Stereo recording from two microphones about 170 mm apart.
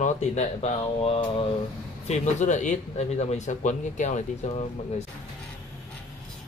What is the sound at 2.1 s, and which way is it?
A man's voice, 45° left (ahead or behind).